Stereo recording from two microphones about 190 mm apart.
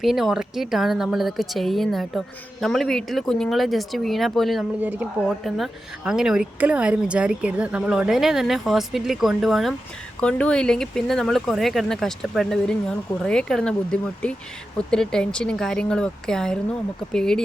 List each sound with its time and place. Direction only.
0.0 s speech: centre (ahead or behind)